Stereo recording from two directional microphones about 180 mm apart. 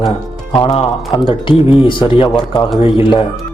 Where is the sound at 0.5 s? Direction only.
25° left (ahead or behind).